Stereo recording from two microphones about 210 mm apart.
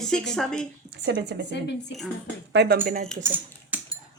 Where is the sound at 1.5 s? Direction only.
55° left (ahead or behind).